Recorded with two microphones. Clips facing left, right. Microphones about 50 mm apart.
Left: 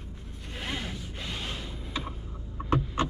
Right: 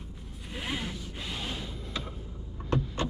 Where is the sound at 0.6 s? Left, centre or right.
Centre.